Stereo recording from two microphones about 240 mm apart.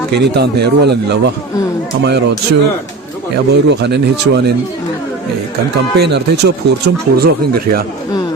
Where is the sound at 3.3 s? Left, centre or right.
Right.